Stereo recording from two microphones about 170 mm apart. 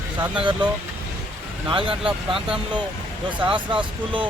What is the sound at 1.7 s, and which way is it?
Speech, 30° right (ahead or behind).